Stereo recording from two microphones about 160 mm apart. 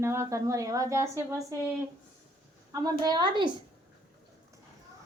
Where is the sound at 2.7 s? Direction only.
25° right (ahead or behind).